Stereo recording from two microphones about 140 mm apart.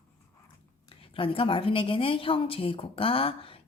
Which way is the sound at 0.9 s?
40° left (ahead or behind).